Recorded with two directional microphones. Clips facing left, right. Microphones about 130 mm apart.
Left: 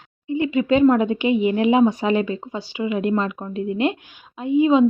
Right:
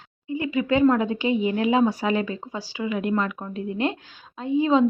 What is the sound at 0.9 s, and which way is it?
A woman's voice, 20° left (ahead or behind).